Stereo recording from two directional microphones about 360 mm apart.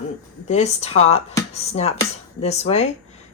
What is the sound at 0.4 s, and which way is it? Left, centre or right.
Speech, centre.